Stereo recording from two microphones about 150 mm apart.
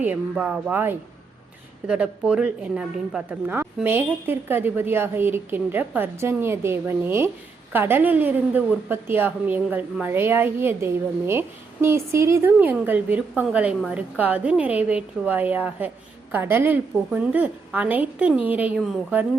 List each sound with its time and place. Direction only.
0.0 s a woman's voice: 10° right (ahead or behind)